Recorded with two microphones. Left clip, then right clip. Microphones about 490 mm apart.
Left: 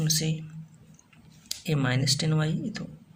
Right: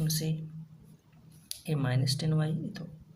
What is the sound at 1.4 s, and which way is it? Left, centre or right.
A man's voice, right.